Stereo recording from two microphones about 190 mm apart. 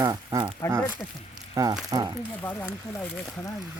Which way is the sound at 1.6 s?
15° right (ahead or behind).